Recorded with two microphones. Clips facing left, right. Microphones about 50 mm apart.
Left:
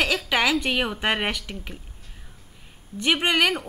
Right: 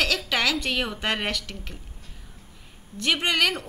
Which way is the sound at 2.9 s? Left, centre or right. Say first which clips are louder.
Left 2 dB; centre.